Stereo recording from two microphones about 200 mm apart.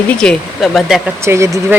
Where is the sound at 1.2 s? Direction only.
15° right (ahead or behind).